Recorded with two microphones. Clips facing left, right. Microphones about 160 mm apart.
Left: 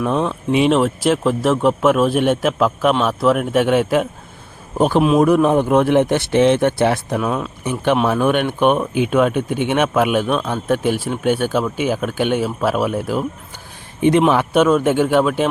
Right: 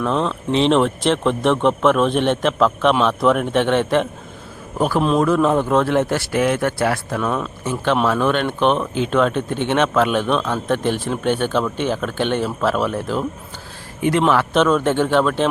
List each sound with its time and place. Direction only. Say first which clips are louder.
0.0 s speech: left 1 dB; 5° left (ahead or behind)
4.8 s speech: left 3 dB; 20° left (ahead or behind)
7.2 s speech: left 1 dB; 5° left (ahead or behind)
7.6 s speech: left 2 dB; 15° left (ahead or behind)